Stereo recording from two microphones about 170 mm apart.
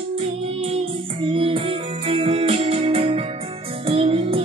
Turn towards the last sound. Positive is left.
turn(degrees=-35)  # may be behind; listen again after turning